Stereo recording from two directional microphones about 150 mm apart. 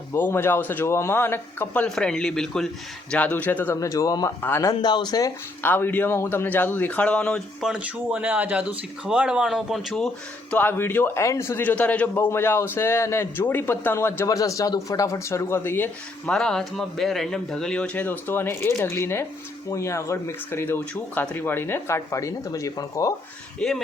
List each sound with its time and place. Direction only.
0.1 s a man's voice: 15° left (ahead or behind)
4.7 s speech: 30° left (ahead or behind)
5.6 s a man's voice: 15° left (ahead or behind)
10.5 s a man's voice: 15° left (ahead or behind)
23.6 s a man's voice: centre (ahead or behind)